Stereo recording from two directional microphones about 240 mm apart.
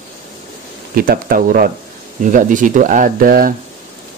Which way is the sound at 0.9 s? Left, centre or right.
Right.